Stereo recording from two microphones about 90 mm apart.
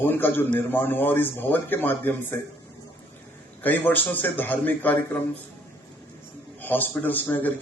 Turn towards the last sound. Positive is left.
turn(degrees=20)  # may be behind; listen again after turning